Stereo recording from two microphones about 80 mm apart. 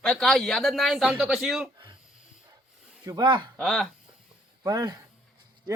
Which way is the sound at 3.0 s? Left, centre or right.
Right.